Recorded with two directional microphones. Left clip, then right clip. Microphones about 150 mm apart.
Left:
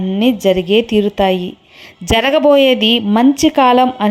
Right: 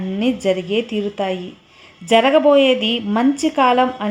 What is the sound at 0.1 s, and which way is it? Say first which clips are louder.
A woman's voice: left 5 dB; 25° left (ahead or behind).